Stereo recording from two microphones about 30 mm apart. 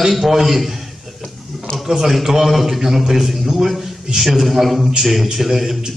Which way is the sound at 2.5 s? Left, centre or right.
Centre.